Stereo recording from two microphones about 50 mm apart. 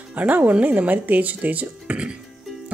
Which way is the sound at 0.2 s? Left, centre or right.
Right.